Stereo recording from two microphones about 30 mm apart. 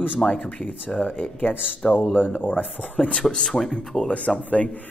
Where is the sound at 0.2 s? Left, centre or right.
Centre.